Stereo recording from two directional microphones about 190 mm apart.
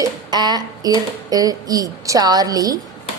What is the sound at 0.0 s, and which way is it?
Speech, 20° right (ahead or behind).